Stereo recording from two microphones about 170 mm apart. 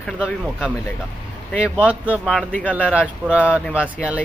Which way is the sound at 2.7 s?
5° right (ahead or behind).